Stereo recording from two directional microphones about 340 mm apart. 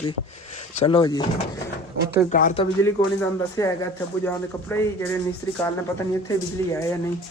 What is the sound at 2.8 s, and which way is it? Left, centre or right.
Speech, centre.